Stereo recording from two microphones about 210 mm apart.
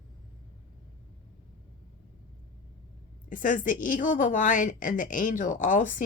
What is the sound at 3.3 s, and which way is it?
A woman's voice, 40° left (ahead or behind).